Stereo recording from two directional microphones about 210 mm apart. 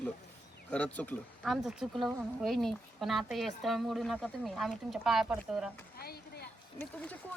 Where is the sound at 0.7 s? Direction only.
5° left (ahead or behind).